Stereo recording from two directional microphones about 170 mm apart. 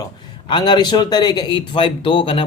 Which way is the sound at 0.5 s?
25° left (ahead or behind).